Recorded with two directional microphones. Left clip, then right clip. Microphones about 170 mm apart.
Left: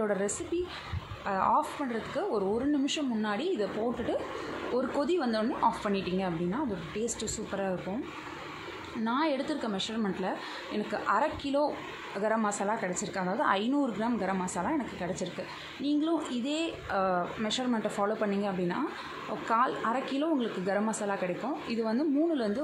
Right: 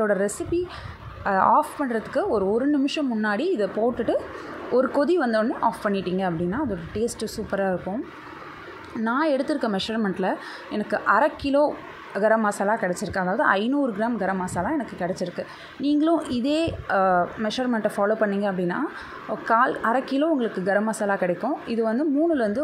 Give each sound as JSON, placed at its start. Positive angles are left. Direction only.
{"t": 0.0, "sound": "a woman's voice", "side_deg": -20}
{"t": 1.2, "sound": "a woman's voice", "side_deg": -35}
{"t": 9.0, "sound": "a woman's voice", "side_deg": -30}
{"t": 15.8, "sound": "a woman's voice", "side_deg": -30}